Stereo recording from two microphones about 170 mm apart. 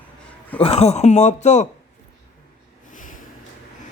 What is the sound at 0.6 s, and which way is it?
Speech, 35° left (ahead or behind).